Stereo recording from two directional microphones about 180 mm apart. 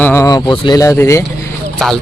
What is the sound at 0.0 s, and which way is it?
Speech, 15° left (ahead or behind).